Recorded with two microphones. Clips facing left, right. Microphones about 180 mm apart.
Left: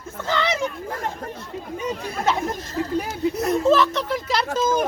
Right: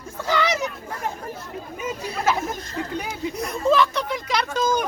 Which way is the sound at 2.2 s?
5° right (ahead or behind).